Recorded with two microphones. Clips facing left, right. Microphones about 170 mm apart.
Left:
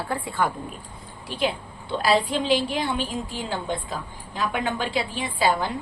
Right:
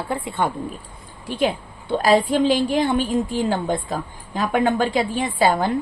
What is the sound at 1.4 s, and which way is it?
A woman's voice, 45° right (ahead or behind).